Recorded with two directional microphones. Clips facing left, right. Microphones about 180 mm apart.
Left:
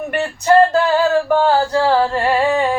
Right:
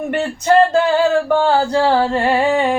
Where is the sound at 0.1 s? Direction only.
20° right (ahead or behind).